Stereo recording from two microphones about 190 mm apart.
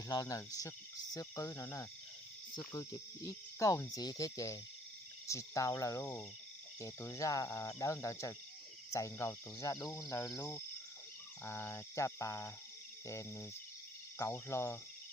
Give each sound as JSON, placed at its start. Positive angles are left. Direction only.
{"t": 0.1, "sound": "cricket", "side_deg": 20}